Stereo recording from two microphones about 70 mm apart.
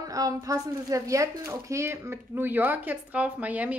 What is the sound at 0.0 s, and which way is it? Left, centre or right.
Speech, right.